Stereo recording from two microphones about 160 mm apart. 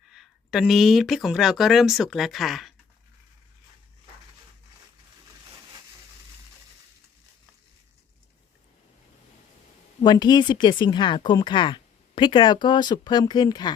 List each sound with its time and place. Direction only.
0.1 s speech: centre (ahead or behind)
10.0 s speech: 25° left (ahead or behind)